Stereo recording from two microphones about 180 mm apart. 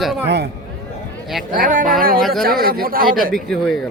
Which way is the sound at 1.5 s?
50° right (ahead or behind).